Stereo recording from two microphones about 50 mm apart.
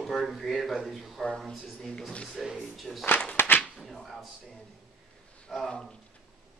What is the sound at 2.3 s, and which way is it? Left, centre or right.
Speech, centre.